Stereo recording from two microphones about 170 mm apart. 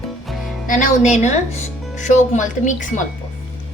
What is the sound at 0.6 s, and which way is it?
Speech, 50° left (ahead or behind).